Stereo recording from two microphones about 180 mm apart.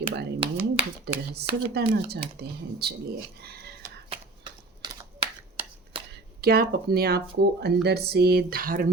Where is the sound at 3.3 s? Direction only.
60° right (ahead or behind).